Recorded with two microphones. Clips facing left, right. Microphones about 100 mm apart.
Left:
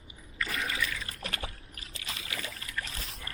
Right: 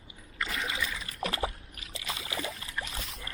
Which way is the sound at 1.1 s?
30° right (ahead or behind).